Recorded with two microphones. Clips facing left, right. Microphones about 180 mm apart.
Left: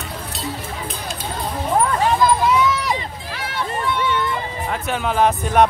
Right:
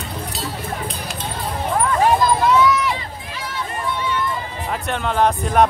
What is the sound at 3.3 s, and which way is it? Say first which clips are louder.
Run: left 3 dB; 65° left (ahead or behind).